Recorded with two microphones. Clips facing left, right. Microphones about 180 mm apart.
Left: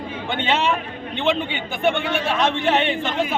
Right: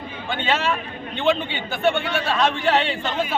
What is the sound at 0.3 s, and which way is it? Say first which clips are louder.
A man's voice: left 2 dB; 20° left (ahead or behind).